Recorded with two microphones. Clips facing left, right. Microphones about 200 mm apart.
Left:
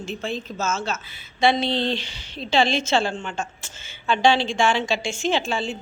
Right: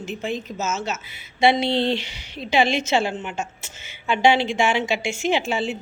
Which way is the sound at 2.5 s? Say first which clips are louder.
Right 1 dB; 20° right (ahead or behind).